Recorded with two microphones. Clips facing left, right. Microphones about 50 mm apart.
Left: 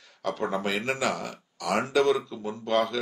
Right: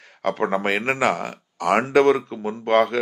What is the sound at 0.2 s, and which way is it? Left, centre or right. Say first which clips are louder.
Speech: right 6 dB; right.